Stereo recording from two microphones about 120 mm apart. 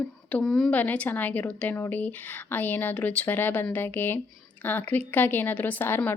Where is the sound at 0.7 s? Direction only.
15° left (ahead or behind).